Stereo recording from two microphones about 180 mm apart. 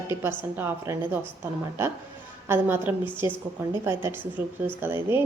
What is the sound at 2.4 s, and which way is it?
A woman's voice, 10° right (ahead or behind).